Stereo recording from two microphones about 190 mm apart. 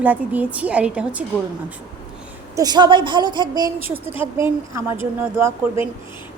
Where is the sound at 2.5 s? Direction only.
20° right (ahead or behind).